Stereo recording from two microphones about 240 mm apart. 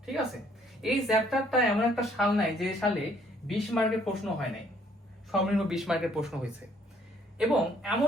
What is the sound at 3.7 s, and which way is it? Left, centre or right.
Speech, centre.